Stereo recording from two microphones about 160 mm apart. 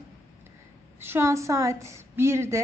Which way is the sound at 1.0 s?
15° right (ahead or behind).